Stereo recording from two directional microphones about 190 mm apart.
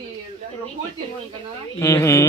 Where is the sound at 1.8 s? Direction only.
15° left (ahead or behind).